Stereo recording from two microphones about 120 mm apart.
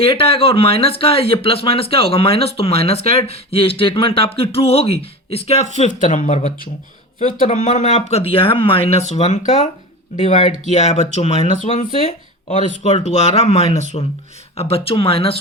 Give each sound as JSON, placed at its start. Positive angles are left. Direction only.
{"t": 0.0, "sound": "speech", "side_deg": 50}
{"t": 12.5, "sound": "speech", "side_deg": 75}